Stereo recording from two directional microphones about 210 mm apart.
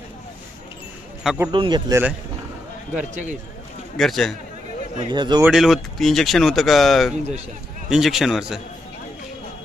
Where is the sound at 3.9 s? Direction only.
Centre (ahead or behind).